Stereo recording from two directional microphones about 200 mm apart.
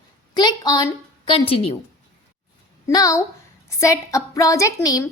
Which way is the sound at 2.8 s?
15° left (ahead or behind).